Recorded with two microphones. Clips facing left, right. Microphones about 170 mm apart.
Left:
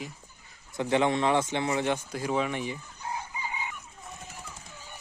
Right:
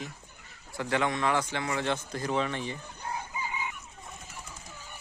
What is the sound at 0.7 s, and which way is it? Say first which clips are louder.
A man's voice: left 4 dB; 20° left (ahead or behind).